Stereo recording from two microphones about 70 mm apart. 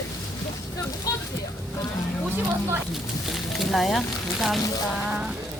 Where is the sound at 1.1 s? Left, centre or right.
Left.